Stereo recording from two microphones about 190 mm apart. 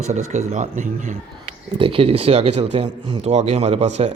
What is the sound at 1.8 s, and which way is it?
A man's voice, 30° right (ahead or behind).